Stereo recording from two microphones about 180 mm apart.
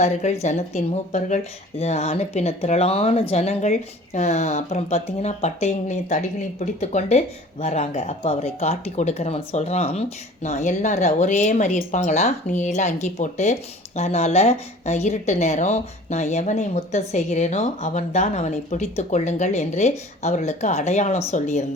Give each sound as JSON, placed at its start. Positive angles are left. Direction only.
{"t": 0.0, "sound": "speech", "side_deg": 40}